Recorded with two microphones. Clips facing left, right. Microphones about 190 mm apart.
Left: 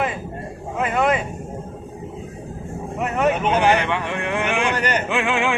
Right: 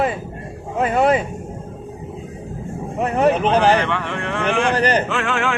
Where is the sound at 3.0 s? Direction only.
35° right (ahead or behind).